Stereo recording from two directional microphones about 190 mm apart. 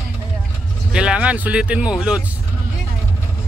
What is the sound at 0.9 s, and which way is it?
Speech, 5° right (ahead or behind).